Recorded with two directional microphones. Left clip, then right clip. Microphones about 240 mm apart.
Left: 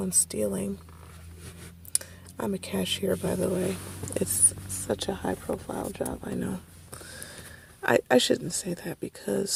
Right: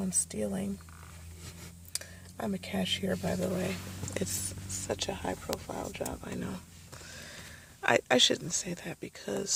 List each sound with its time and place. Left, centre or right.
0.0 s speech: left
2.4 s speech: left
7.8 s speech: centre